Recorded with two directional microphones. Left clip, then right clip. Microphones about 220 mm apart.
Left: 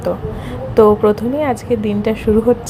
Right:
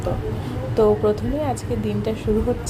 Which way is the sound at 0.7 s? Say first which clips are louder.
Left 7 dB; 25° left (ahead or behind).